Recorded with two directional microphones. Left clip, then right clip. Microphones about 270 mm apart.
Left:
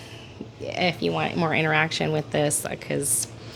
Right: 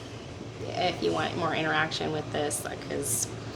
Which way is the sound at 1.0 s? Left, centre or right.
Left.